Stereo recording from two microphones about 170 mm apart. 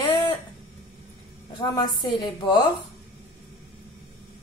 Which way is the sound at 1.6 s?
25° left (ahead or behind).